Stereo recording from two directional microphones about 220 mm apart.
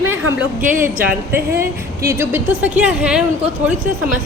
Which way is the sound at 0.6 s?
35° right (ahead or behind).